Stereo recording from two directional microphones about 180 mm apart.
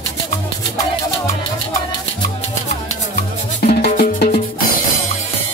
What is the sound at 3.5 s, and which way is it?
Music, 50° left (ahead or behind).